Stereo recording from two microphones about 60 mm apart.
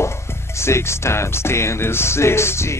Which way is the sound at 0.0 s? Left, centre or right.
Left.